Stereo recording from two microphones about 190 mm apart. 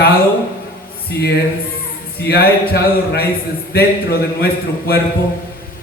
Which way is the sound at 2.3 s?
55° left (ahead or behind).